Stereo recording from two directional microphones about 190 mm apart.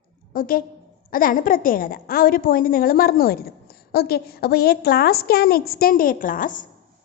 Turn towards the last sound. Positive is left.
turn(degrees=45)  # may be behind; listen again after turning